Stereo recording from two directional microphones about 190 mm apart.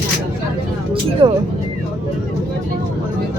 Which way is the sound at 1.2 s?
25° right (ahead or behind).